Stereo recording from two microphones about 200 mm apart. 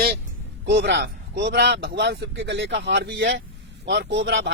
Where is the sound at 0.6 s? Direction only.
55° right (ahead or behind).